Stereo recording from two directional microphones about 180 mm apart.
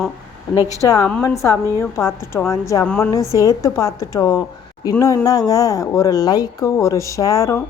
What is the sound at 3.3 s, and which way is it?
A woman's voice, 15° left (ahead or behind).